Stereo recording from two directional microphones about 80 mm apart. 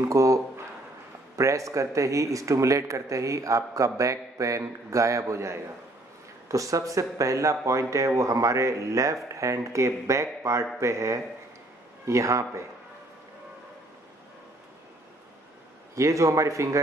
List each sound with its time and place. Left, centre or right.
0.1 s speech: right
15.9 s speech: right